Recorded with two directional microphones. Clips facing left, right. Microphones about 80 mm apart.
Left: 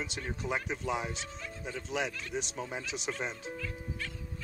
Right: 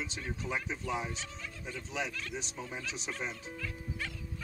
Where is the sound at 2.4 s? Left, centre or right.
Left.